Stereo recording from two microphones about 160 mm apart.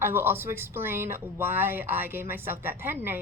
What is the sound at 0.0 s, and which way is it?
Speech, 15° right (ahead or behind).